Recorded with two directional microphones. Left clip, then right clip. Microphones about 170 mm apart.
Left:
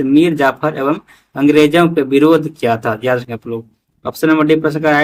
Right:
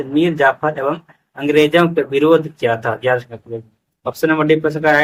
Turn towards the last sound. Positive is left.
turn(degrees=45)  # may be behind; listen again after turning